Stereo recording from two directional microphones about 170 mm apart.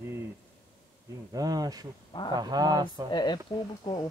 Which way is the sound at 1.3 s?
20° right (ahead or behind).